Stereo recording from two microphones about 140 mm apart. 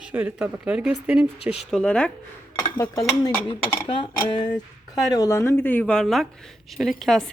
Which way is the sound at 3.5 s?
35° left (ahead or behind).